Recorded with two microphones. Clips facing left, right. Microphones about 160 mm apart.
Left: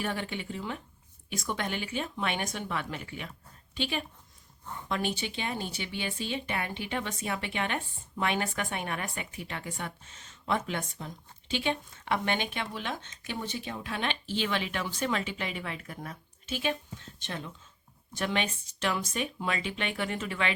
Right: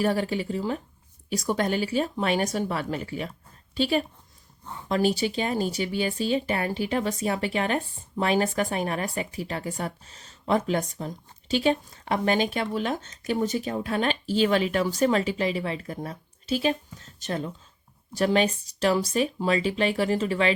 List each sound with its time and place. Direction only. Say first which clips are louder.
0.0 s speech: right 9 dB; 35° right (ahead or behind)